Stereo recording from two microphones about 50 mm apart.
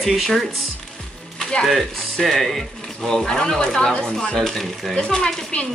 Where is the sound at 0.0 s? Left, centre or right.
Centre.